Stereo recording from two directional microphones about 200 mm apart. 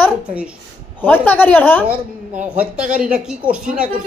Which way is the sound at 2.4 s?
5° right (ahead or behind).